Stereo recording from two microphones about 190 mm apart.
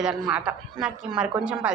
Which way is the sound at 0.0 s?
5° right (ahead or behind).